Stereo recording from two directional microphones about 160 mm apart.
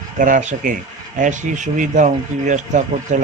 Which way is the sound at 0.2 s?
55° right (ahead or behind).